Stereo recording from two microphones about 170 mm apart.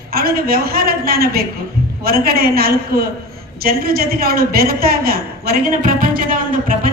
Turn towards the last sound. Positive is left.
turn(degrees=-55)  # may be behind; listen again after turning